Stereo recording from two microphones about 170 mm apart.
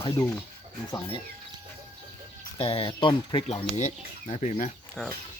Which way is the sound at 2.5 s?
30° left (ahead or behind).